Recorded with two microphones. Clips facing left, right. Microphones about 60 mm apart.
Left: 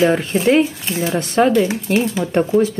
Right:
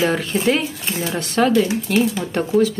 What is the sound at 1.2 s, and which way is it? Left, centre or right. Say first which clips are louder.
Speech: left 2 dB; centre.